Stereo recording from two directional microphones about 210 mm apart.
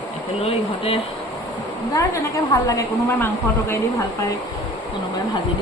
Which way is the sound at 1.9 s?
15° left (ahead or behind).